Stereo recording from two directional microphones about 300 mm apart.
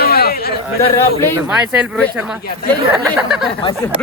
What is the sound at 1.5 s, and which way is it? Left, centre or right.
Speech, centre.